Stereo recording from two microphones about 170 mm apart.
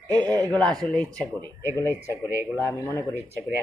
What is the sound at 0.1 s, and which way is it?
Speech, 25° right (ahead or behind).